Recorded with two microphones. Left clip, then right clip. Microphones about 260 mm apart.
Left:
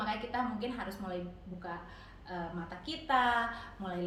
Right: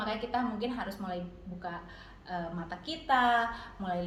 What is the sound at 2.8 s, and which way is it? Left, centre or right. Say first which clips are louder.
Speech: right 3 dB; centre.